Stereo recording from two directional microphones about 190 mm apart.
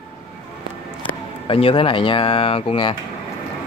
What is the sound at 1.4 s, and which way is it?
Speech, 30° left (ahead or behind).